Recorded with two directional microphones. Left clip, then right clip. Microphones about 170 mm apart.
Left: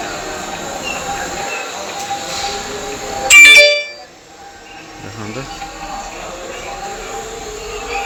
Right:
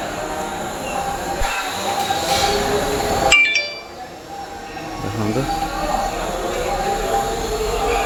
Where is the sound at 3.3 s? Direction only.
65° left (ahead or behind).